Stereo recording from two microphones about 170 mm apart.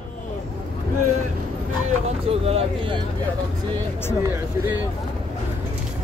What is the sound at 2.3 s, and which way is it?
Speech, 35° right (ahead or behind).